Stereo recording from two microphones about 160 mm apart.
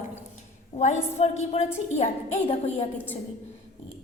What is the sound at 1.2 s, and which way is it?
A woman's voice, 45° left (ahead or behind).